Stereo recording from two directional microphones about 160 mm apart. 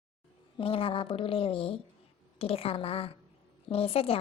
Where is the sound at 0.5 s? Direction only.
35° left (ahead or behind).